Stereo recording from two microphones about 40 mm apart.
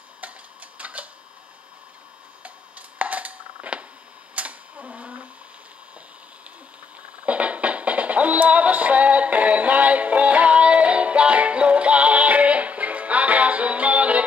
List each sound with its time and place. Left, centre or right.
0.2 s tick-tock: right
3.0 s a sound: right
7.2 s music: right